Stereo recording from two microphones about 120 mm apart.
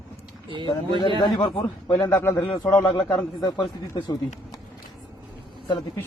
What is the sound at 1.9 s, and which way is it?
Speech, 25° left (ahead or behind).